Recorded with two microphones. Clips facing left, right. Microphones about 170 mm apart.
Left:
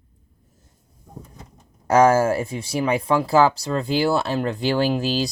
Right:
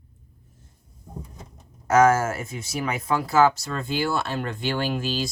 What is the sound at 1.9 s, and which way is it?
Speech, 30° left (ahead or behind).